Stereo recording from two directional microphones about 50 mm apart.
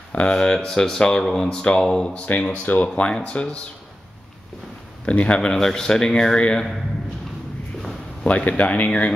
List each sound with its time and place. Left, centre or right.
0.1 s speech: centre
2.2 s speech: left
3.0 s speech: centre
5.0 s speech: left
8.2 s speech: left